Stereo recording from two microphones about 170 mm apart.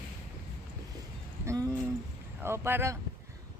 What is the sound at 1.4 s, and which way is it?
A woman's voice, 20° right (ahead or behind).